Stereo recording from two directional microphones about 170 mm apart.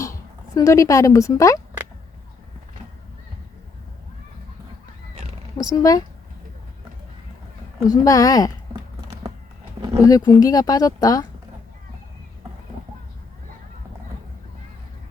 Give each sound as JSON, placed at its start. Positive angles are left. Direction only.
{"t": 0.0, "sound": "speech", "side_deg": 20}
{"t": 5.7, "sound": "speech", "side_deg": 20}
{"t": 7.9, "sound": "speech", "side_deg": 20}
{"t": 10.0, "sound": "speech", "side_deg": 20}